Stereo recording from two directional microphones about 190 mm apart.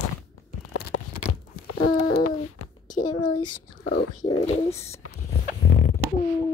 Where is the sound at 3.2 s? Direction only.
25° left (ahead or behind).